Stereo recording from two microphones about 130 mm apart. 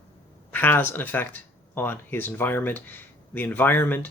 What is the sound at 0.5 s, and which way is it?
Speech, 15° left (ahead or behind).